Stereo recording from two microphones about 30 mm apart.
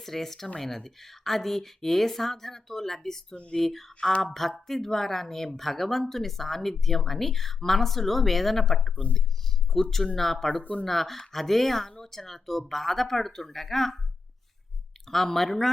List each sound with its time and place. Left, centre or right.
0.0 s speech: centre
10.6 s speech: left
10.8 s speech: centre
15.1 s speech: centre